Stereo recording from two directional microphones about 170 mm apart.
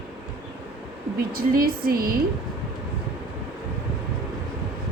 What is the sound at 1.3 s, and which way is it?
Speech, 60° right (ahead or behind).